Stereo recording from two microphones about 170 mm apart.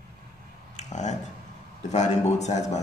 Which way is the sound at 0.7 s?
45° left (ahead or behind).